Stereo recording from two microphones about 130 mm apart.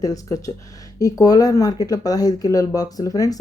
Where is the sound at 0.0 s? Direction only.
25° left (ahead or behind).